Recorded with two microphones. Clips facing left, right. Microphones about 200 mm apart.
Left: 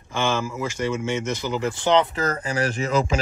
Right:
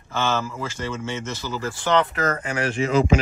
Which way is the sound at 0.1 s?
15° left (ahead or behind).